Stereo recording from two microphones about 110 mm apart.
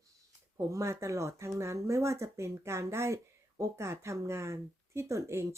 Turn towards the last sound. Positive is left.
turn(degrees=-25)  # may be behind; listen again after turning